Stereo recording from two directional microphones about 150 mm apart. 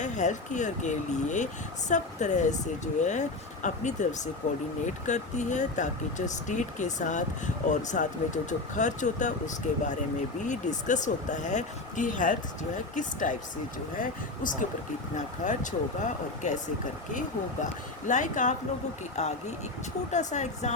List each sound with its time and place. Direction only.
0.0 s speech: 55° left (ahead or behind)